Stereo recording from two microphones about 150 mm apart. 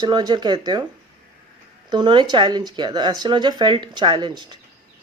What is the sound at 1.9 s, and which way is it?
Speech, 30° right (ahead or behind).